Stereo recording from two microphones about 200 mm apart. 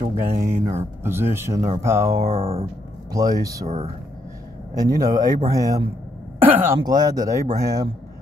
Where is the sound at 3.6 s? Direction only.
30° right (ahead or behind).